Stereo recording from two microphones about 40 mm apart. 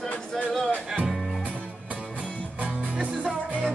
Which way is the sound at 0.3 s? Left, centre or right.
Centre.